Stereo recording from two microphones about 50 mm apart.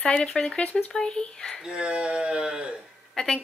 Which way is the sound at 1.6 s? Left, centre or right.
Centre.